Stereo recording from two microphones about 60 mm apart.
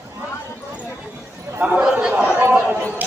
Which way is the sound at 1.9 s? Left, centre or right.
Centre.